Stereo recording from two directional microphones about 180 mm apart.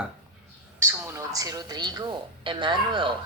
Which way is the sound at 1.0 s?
20° right (ahead or behind).